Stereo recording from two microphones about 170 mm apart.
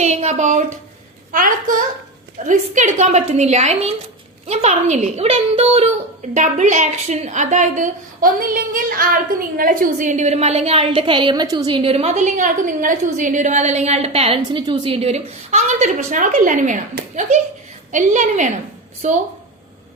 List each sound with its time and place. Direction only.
0.0 s a woman's voice: 40° right (ahead or behind)